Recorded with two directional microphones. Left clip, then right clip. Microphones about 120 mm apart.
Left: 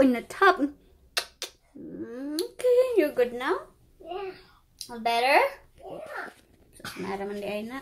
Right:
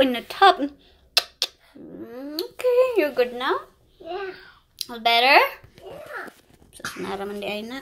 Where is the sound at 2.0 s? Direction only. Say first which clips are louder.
Right 1 dB; 40° left (ahead or behind).